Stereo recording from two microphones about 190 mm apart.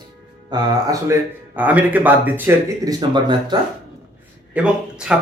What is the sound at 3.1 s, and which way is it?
Speech, 25° right (ahead or behind).